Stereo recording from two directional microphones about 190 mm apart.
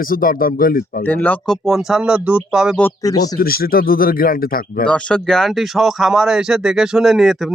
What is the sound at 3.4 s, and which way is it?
Speech, 50° left (ahead or behind).